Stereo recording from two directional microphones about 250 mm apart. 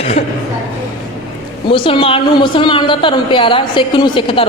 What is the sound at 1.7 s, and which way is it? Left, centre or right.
A woman's voice, left.